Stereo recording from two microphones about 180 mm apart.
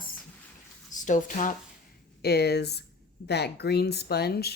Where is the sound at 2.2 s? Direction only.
60° left (ahead or behind).